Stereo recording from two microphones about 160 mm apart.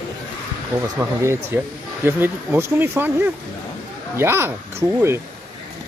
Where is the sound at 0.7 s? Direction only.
15° right (ahead or behind).